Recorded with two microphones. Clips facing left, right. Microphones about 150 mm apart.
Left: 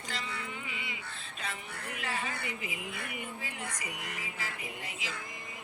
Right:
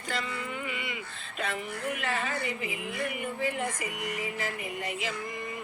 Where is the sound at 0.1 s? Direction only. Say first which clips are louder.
Right 7 dB; 60° right (ahead or behind).